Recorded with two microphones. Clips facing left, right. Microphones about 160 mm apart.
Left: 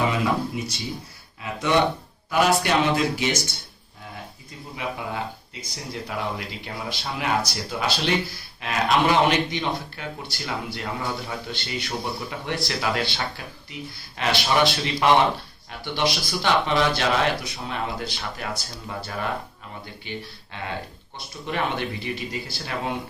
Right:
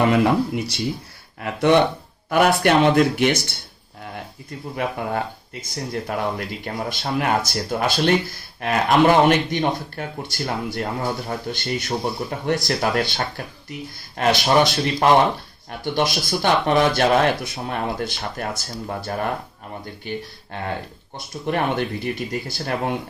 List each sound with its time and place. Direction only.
0.0 s speech: 65° right (ahead or behind)
4.7 s speech: 55° right (ahead or behind)